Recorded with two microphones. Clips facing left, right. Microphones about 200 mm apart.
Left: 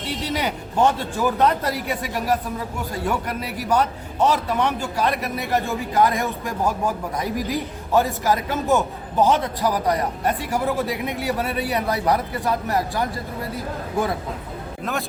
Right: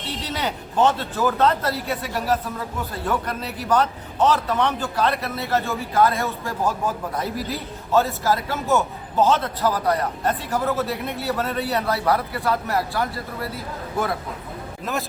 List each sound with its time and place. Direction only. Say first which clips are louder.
0.0 s a man's voice: left 3 dB; 10° left (ahead or behind)